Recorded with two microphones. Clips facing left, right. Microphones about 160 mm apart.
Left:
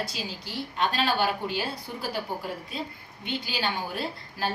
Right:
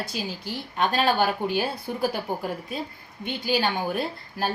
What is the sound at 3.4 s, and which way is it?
A woman's voice, 50° right (ahead or behind).